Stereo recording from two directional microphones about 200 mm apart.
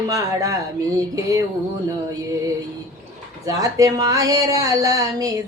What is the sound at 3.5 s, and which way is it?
Speech, 15° right (ahead or behind).